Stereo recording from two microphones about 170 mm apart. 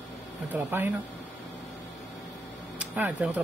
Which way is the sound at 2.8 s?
10° right (ahead or behind).